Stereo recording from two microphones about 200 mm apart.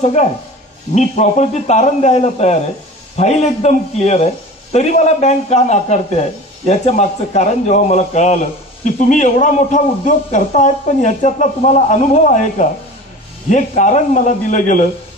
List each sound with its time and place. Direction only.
0.0 s a man's voice: 35° left (ahead or behind)